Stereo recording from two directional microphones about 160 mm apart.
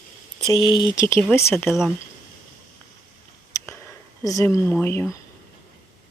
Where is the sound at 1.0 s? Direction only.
15° left (ahead or behind).